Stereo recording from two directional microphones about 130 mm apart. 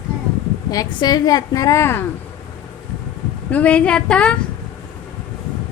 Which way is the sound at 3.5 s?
10° left (ahead or behind).